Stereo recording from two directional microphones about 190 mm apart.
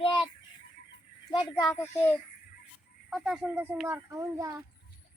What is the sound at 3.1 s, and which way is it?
A child's voice, centre (ahead or behind).